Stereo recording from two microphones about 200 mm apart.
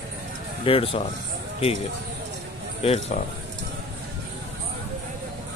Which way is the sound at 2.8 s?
30° left (ahead or behind).